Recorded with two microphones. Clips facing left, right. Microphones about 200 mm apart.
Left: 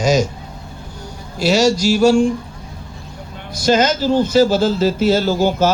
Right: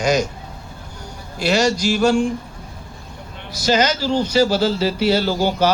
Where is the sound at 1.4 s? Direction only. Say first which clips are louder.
Left 3 dB; 55° right (ahead or behind).